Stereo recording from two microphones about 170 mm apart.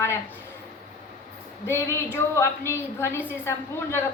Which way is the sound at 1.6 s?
15° left (ahead or behind).